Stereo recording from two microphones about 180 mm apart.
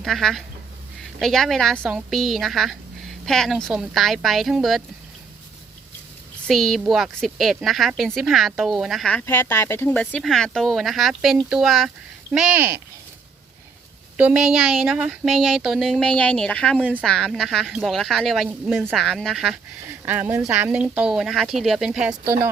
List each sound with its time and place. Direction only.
0.0 s a woman's voice: centre (ahead or behind)
6.5 s a woman's voice: centre (ahead or behind)
14.2 s a woman's voice: 5° right (ahead or behind)
20.1 s a woman's voice: 10° right (ahead or behind)